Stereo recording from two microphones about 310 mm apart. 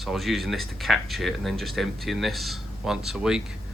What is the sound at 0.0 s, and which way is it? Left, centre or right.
Speech, centre.